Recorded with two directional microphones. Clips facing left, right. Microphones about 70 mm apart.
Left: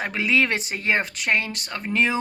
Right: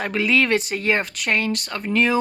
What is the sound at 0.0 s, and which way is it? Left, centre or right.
A woman's voice, left.